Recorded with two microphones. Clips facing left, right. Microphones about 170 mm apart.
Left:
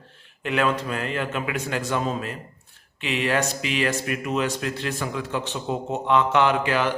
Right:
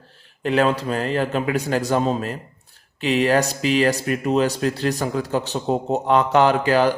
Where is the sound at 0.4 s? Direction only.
35° right (ahead or behind).